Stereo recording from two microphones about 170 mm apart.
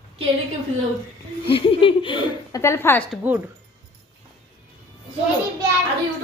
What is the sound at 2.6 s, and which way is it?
Speech, 15° left (ahead or behind).